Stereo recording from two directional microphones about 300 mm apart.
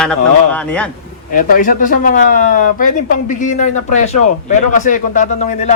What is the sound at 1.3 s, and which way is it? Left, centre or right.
Speech, left.